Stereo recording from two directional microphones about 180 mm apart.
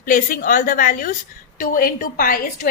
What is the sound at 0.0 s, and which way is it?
A woman's voice, 50° left (ahead or behind).